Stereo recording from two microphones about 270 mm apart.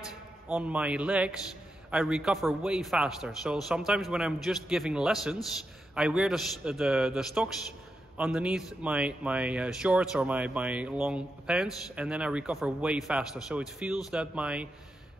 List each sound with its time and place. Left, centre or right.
0.5 s speech: centre